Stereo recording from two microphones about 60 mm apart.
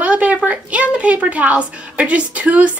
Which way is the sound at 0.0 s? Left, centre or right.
Right.